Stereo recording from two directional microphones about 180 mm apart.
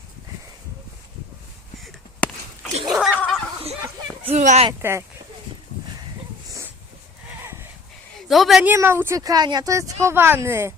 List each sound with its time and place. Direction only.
2.2 s a sound: 5° left (ahead or behind)
3.2 s snicker: centre (ahead or behind)
4.2 s speech: 35° right (ahead or behind)
4.8 s speech: 15° right (ahead or behind)
8.1 s speech: centre (ahead or behind)
8.7 s speech: 15° right (ahead or behind)